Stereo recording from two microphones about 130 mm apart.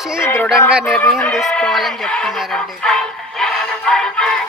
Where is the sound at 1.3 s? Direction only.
5° left (ahead or behind).